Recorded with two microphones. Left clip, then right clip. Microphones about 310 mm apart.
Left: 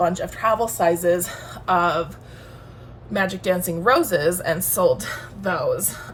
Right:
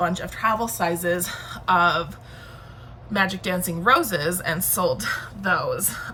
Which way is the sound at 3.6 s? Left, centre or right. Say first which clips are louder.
Right 1 dB; centre.